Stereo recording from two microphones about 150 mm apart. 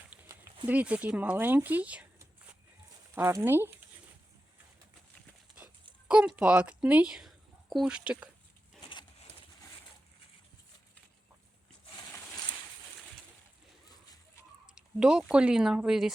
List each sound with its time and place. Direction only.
0.1 s a sound: 10° right (ahead or behind)
0.7 s speech: 10° right (ahead or behind)
3.2 s speech: 15° right (ahead or behind)
6.1 s speech: 5° right (ahead or behind)
8.8 s a sound: 30° left (ahead or behind)
14.8 s speech: 5° right (ahead or behind)